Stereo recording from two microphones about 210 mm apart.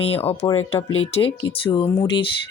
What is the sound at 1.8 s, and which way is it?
Speech, 10° left (ahead or behind).